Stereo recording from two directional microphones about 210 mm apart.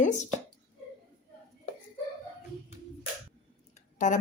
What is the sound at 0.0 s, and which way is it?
Speech, 35° left (ahead or behind).